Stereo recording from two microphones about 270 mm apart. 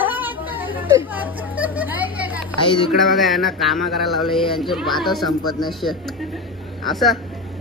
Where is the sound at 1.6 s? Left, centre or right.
Centre.